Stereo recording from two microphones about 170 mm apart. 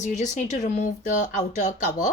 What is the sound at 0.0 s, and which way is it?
Speech, 45° left (ahead or behind).